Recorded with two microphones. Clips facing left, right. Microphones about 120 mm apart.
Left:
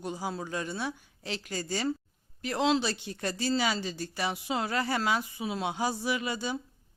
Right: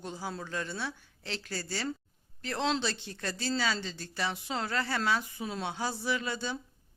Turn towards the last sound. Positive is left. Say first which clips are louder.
# left 2 dB
turn(degrees=10)  # may be behind; listen again after turning